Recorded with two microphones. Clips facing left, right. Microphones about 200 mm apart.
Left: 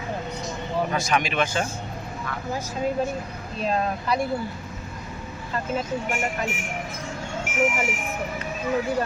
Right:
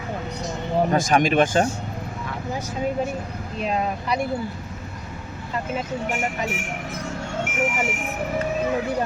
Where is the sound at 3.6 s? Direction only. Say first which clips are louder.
Even; 15° right (ahead or behind).